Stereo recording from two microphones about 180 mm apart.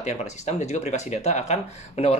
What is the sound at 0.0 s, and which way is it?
Speech, 40° left (ahead or behind).